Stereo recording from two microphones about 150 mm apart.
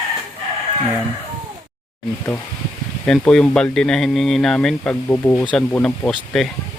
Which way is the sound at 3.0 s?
5° left (ahead or behind).